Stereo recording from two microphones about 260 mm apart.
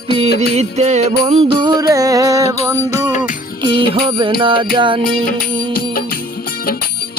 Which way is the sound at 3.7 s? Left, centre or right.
Centre.